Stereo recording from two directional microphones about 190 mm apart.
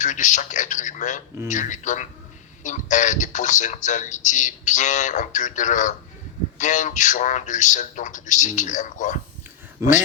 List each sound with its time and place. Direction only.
0.0 s speech: 40° left (ahead or behind)
9.8 s speech: 15° right (ahead or behind)